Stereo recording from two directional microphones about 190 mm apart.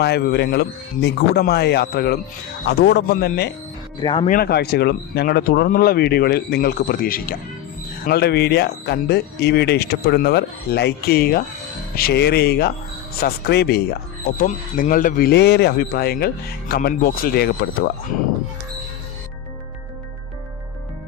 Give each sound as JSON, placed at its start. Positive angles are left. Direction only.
{"t": 0.0, "sound": "speech", "side_deg": 55}
{"t": 4.0, "sound": "speech", "side_deg": 25}
{"t": 4.3, "sound": "speech", "side_deg": 55}
{"t": 14.3, "sound": "speech", "side_deg": 45}